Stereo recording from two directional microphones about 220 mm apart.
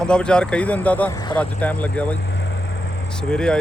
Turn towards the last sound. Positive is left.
turn(degrees=5)  # may be behind; listen again after turning